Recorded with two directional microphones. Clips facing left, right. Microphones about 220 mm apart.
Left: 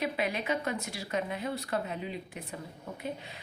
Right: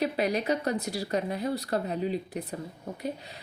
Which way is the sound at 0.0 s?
40° right (ahead or behind).